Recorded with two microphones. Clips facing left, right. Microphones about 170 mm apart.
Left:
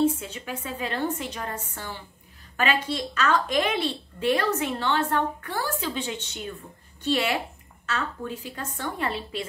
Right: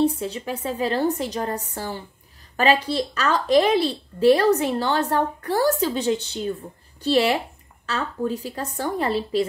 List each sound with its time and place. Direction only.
0.0 s a woman's voice: 35° right (ahead or behind)